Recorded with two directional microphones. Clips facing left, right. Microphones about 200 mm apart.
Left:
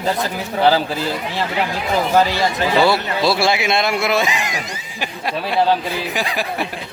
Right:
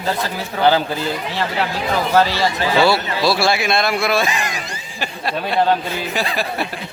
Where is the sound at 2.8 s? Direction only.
20° left (ahead or behind).